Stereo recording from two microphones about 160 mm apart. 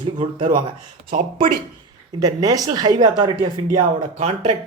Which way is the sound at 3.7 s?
55° right (ahead or behind).